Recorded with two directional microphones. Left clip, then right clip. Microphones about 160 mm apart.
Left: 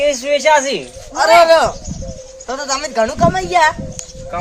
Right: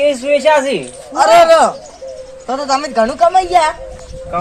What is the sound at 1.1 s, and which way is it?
A woman's voice, 35° left (ahead or behind).